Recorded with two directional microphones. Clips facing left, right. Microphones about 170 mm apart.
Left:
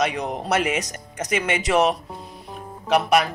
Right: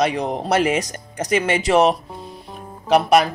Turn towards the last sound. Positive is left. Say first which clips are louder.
# right 4 dB
turn(degrees=-35)  # may be behind; listen again after turning